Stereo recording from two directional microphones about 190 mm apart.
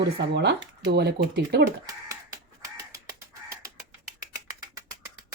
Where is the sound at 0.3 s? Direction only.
60° right (ahead or behind).